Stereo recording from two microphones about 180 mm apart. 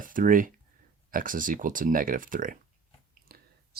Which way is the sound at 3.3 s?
55° right (ahead or behind).